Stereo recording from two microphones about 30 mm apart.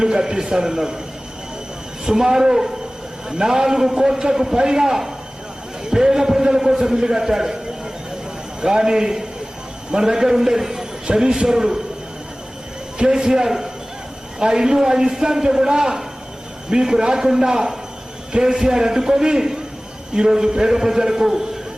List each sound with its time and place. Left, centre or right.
0.0 s a man's voice: right
2.0 s a man's voice: centre
8.6 s a man's voice: right
13.1 s a man's voice: right